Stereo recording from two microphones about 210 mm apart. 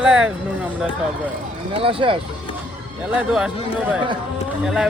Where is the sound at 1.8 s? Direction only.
25° right (ahead or behind).